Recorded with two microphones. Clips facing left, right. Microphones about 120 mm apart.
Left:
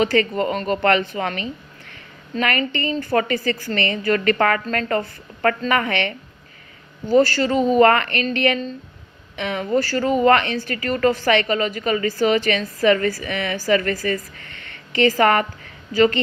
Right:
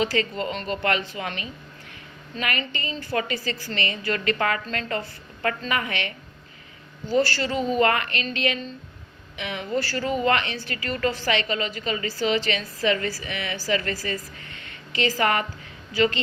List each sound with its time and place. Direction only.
0.0 s a woman's voice: 55° left (ahead or behind)
7.1 s a woman's voice: 45° left (ahead or behind)